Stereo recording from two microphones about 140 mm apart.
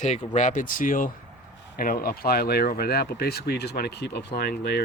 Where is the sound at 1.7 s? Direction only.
90° left.